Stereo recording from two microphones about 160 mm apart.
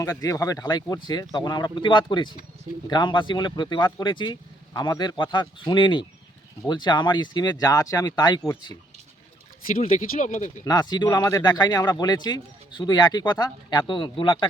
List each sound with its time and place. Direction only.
0.0 s speech: 20° left (ahead or behind)
9.7 s speech: 60° left (ahead or behind)
10.6 s speech: 25° left (ahead or behind)